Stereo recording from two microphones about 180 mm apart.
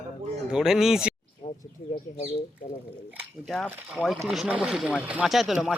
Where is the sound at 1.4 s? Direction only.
40° left (ahead or behind).